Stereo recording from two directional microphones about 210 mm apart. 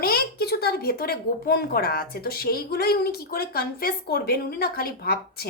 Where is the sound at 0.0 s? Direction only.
45° left (ahead or behind).